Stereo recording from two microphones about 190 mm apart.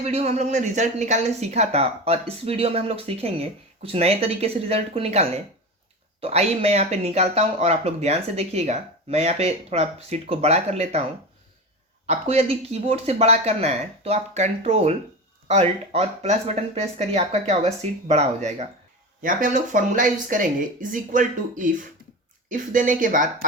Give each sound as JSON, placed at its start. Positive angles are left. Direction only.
{"t": 0.0, "sound": "speech", "side_deg": -35}
{"t": 12.0, "sound": "speech", "side_deg": -35}